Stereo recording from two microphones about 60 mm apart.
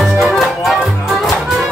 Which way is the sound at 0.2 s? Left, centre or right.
Centre.